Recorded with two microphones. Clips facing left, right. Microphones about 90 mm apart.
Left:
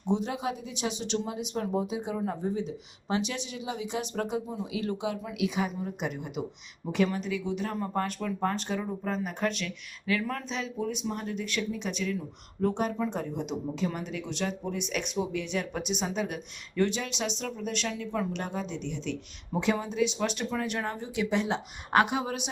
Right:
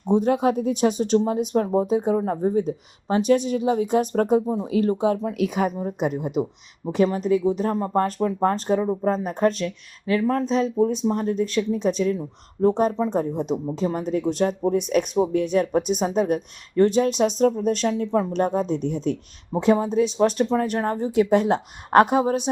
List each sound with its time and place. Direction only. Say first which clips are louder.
0.1 s speech: right 10 dB; 50° right (ahead or behind)